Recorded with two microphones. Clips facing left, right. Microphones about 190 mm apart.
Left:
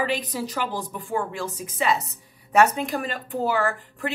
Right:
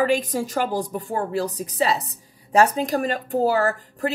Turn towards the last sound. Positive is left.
turn(degrees=-40)  # may be behind; listen again after turning